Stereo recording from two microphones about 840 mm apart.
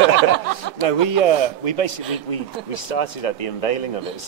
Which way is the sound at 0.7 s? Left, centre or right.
Left.